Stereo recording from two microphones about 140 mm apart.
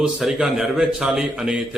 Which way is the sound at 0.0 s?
5° right (ahead or behind).